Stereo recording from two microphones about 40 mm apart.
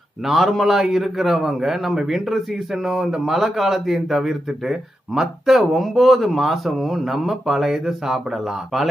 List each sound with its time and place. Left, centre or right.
0.3 s speech: centre